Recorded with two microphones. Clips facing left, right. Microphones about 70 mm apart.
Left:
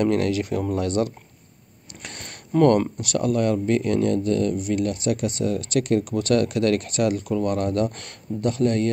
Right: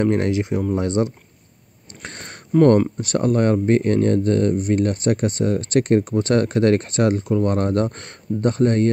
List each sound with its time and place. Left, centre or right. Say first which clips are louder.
0.0 s speech: right 2 dB; right
2.0 s a sound: right 3 dB; right
3.0 s speech: right 3 dB; right